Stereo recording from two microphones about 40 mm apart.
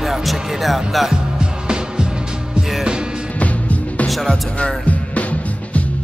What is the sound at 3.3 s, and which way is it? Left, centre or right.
Music, left.